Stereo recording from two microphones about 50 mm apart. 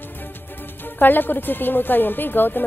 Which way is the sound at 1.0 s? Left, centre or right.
Left.